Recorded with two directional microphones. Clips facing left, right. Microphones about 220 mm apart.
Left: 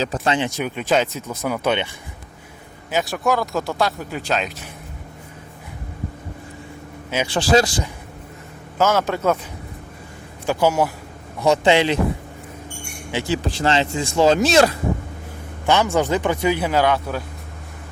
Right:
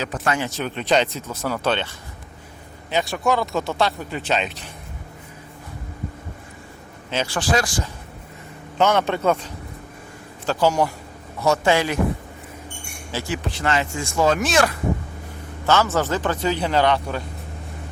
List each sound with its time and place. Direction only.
0.0 s speech: 25° left (ahead or behind)
2.9 s speech: centre (ahead or behind)
7.3 s speech: 25° left (ahead or behind)
8.8 s speech: 5° left (ahead or behind)
10.4 s speech: 10° left (ahead or behind)
11.4 s speech: 20° left (ahead or behind)
13.2 s speech: 30° left (ahead or behind)
15.6 s speech: 15° left (ahead or behind)